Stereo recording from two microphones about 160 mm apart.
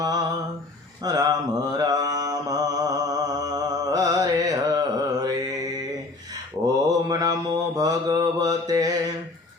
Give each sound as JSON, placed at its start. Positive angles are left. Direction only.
{"t": 0.0, "sound": "a sound", "side_deg": -25}
{"t": 1.0, "sound": "mantra", "side_deg": -25}
{"t": 6.7, "sound": "mantra", "side_deg": -25}